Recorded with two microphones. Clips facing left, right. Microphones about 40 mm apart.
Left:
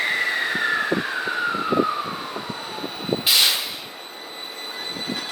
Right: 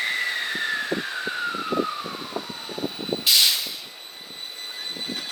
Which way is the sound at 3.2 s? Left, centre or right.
Left.